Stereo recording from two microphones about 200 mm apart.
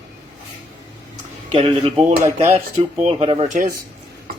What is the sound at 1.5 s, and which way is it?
Speech, 30° right (ahead or behind).